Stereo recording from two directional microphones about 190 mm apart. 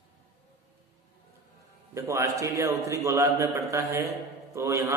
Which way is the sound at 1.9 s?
15° right (ahead or behind).